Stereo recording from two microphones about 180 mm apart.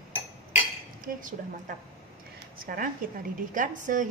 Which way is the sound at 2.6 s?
50° right (ahead or behind).